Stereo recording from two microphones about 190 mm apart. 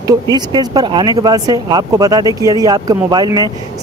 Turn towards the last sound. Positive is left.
turn(degrees=-20)  # may be behind; listen again after turning